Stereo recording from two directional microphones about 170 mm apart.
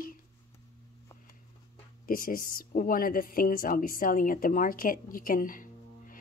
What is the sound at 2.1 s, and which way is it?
A woman's voice, 60° left (ahead or behind).